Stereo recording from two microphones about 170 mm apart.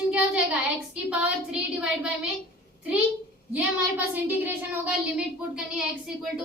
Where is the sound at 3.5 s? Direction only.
10° right (ahead or behind).